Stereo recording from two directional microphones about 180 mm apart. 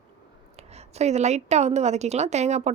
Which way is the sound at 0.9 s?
40° right (ahead or behind).